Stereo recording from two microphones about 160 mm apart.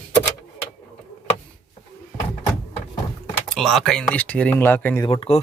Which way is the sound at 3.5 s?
Centre (ahead or behind).